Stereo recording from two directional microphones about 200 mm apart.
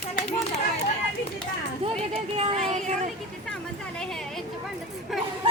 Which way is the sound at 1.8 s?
30° right (ahead or behind).